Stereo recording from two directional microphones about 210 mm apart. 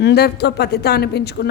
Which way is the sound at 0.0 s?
50° left (ahead or behind).